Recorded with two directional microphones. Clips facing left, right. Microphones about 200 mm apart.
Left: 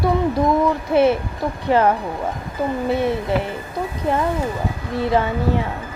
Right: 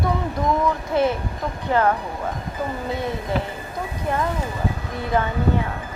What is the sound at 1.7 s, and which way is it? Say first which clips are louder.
Speech: left 3 dB; 20° left (ahead or behind).